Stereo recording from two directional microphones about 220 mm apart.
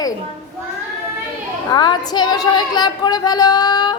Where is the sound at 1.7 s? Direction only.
20° left (ahead or behind).